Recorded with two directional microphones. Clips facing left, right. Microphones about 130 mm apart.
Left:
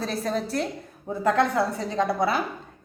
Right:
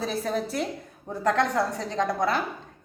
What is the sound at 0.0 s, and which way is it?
A woman's voice, 5° right (ahead or behind).